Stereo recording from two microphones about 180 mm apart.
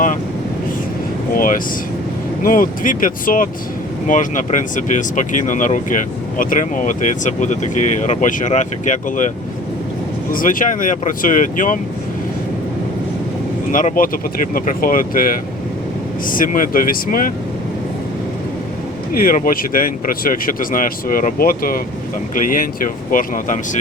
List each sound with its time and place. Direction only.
1.3 s speech: 50° left (ahead or behind)
10.3 s speech: 50° left (ahead or behind)
13.7 s speech: 45° left (ahead or behind)
19.2 s speech: 50° left (ahead or behind)